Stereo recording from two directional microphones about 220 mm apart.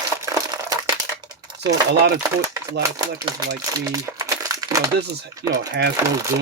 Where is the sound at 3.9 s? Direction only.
15° right (ahead or behind).